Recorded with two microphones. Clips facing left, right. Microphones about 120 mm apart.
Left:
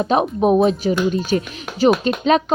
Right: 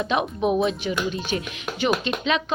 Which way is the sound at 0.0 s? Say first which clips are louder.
Left 6 dB; 35° left (ahead or behind).